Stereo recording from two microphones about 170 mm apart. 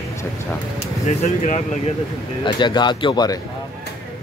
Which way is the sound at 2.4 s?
25° left (ahead or behind).